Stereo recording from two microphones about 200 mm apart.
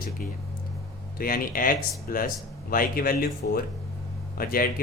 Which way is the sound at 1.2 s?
45° left (ahead or behind).